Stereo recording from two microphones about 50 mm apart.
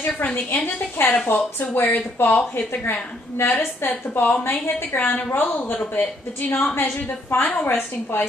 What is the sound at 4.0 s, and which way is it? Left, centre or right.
Speech, left.